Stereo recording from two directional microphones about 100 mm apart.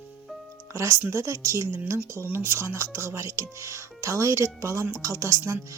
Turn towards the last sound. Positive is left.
turn(degrees=-25)  # may be behind; listen again after turning